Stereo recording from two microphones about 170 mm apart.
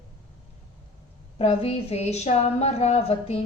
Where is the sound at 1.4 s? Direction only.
35° left (ahead or behind).